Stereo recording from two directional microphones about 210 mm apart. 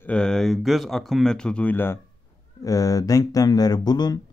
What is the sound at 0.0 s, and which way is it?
Speech, 5° left (ahead or behind).